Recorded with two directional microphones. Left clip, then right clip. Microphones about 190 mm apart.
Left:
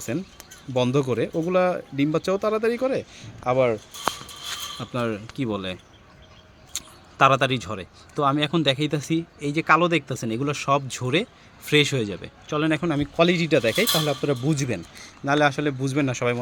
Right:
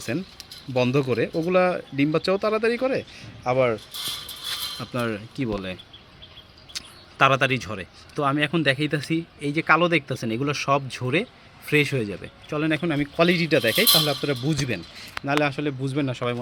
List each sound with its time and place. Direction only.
0.7 s speech: centre (ahead or behind)
4.8 s speech: 5° left (ahead or behind)
6.7 s speech: 5° left (ahead or behind)
15.2 s a man's voice: 25° left (ahead or behind)